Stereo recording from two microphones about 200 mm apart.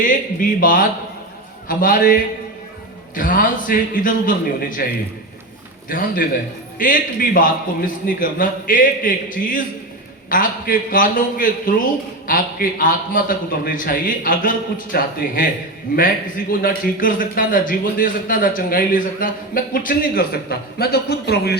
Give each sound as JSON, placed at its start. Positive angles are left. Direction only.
{"t": 0.0, "sound": "a man's voice", "side_deg": 45}
{"t": 5.9, "sound": "a man's voice", "side_deg": 45}